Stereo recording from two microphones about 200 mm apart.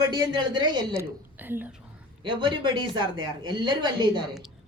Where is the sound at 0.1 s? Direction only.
20° right (ahead or behind).